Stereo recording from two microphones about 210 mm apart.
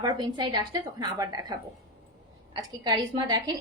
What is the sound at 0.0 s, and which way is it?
A woman's voice, 20° right (ahead or behind).